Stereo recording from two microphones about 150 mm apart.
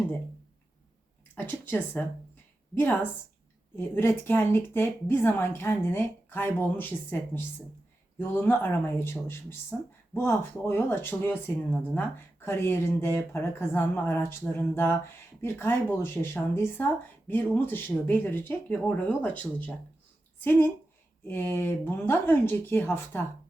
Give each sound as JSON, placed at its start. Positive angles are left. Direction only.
{"t": 1.4, "sound": "speech", "side_deg": 15}
{"t": 3.8, "sound": "speech", "side_deg": 15}